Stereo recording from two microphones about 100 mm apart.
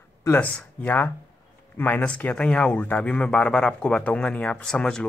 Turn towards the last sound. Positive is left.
turn(degrees=10)  # may be behind; listen again after turning